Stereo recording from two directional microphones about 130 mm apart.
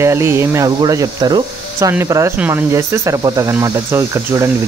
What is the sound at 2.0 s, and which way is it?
Speech, 25° right (ahead or behind).